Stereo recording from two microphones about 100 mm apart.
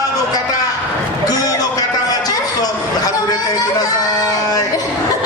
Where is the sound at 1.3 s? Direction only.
40° left (ahead or behind).